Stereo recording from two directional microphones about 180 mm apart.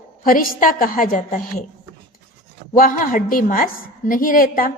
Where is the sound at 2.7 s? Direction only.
50° left (ahead or behind).